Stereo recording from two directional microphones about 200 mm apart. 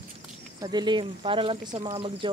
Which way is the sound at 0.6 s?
20° right (ahead or behind).